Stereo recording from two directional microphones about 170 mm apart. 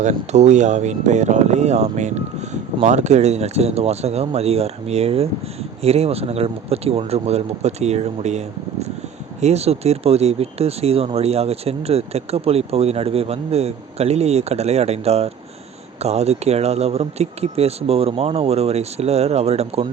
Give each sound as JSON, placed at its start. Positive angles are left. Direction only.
{"t": 0.0, "sound": "speech", "side_deg": -45}